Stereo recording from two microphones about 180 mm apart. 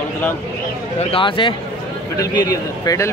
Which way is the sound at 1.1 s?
30° left (ahead or behind).